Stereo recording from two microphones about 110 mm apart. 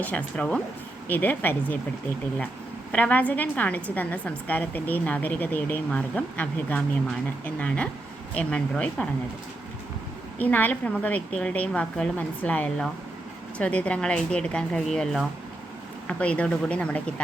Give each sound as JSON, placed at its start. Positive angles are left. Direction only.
{"t": 0.0, "sound": "a woman's voice", "side_deg": 10}
{"t": 2.9, "sound": "a woman's voice", "side_deg": 15}
{"t": 10.3, "sound": "a woman's voice", "side_deg": 15}